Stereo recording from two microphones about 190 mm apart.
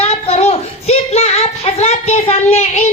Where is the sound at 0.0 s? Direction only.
35° left (ahead or behind).